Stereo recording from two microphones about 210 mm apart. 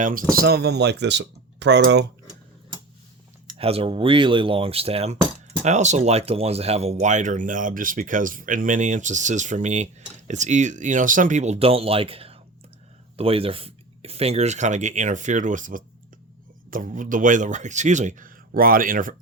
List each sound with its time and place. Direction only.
0.0 s speech: 40° right (ahead or behind)
3.6 s speech: 25° right (ahead or behind)